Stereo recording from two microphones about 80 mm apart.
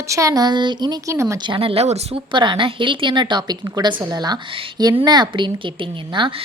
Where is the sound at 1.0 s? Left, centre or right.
Right.